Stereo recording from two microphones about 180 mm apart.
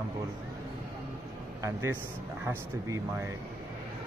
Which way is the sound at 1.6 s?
15° right (ahead or behind).